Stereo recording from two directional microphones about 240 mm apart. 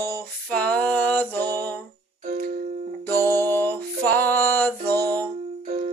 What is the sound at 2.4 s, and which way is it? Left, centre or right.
Music, right.